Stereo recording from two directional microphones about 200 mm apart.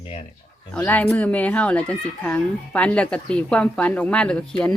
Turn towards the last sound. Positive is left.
turn(degrees=5)  # may be behind; listen again after turning